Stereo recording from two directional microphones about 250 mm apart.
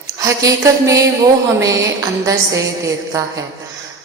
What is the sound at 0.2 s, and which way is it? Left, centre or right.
Speech, centre.